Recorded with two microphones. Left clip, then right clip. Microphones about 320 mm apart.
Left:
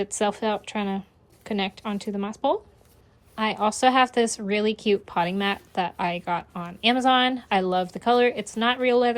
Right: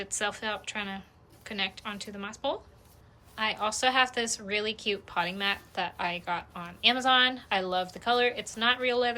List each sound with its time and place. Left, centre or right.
0.0 s a woman's voice: centre